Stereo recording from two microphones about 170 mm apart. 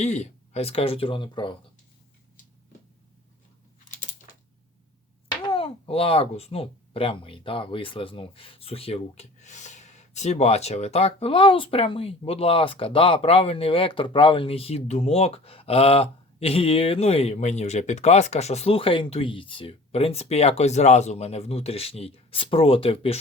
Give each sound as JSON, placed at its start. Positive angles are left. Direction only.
{"t": 0.0, "sound": "a child's voice", "side_deg": 40}
{"t": 3.8, "sound": "a sound", "side_deg": 45}
{"t": 5.4, "sound": "a child's voice", "side_deg": 30}